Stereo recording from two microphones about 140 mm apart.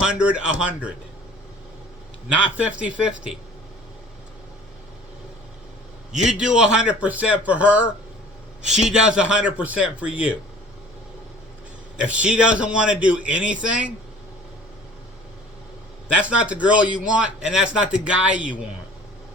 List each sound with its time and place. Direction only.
0.0 s a man's voice: 10° right (ahead or behind)
2.6 s a man's voice: 10° right (ahead or behind)
6.1 s a man's voice: 5° right (ahead or behind)
12.0 s a man's voice: 10° right (ahead or behind)
16.2 s a man's voice: 10° right (ahead or behind)